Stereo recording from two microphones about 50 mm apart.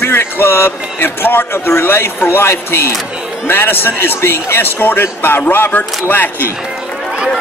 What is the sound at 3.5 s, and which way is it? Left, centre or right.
A man's voice, left.